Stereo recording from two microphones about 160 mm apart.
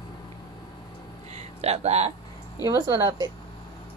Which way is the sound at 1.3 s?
40° right (ahead or behind).